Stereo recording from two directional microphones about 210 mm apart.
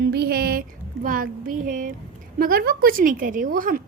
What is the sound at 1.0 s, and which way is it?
A woman's voice, 40° right (ahead or behind).